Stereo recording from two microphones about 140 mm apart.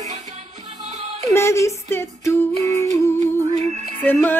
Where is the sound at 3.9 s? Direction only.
15° left (ahead or behind).